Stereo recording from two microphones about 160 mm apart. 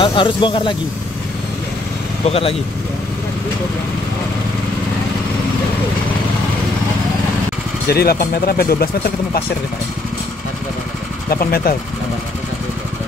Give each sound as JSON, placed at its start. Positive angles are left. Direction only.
{"t": 0.0, "sound": "speech", "side_deg": 30}
{"t": 2.2, "sound": "speech", "side_deg": 40}
{"t": 7.9, "sound": "speech", "side_deg": 75}
{"t": 11.2, "sound": "speech", "side_deg": 70}